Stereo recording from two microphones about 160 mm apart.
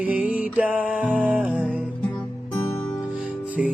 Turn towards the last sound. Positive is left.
turn(degrees=-5)  # may be behind; listen again after turning